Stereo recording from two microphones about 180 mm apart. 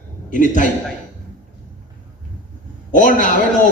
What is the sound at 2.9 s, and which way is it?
Speech, 45° left (ahead or behind).